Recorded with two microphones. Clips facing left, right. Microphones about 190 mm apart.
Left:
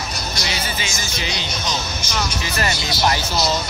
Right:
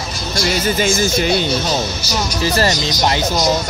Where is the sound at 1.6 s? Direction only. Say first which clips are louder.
Right 6 dB; 35° right (ahead or behind).